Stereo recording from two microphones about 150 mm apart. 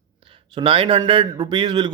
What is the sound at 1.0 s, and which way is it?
Speech, 35° right (ahead or behind).